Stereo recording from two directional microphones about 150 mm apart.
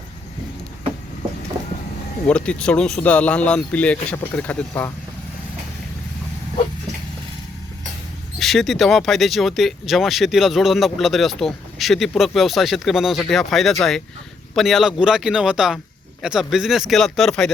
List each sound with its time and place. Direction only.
2.2 s speech: 5° left (ahead or behind)
8.4 s speech: centre (ahead or behind)